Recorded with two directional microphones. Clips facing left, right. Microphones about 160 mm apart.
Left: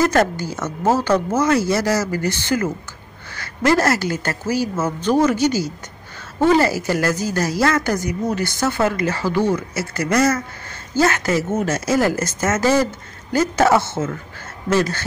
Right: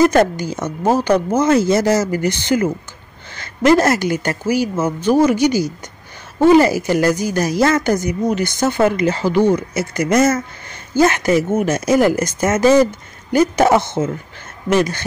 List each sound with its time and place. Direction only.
0.0 s a woman's voice: 20° right (ahead or behind)